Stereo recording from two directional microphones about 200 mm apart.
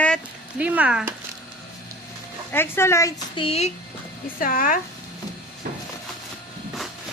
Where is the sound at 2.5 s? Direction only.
10° left (ahead or behind); by 3.7 s 30° left (ahead or behind).